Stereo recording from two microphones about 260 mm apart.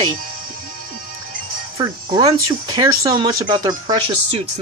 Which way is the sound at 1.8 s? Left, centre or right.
Centre.